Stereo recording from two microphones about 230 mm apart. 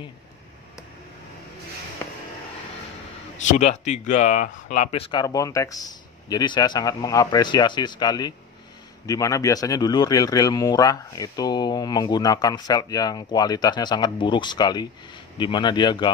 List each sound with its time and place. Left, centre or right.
3.4 s a man's voice: left